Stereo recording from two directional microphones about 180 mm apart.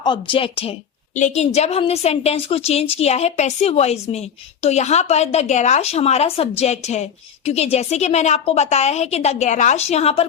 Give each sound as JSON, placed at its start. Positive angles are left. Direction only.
{"t": 0.0, "sound": "a woman's voice", "side_deg": 25}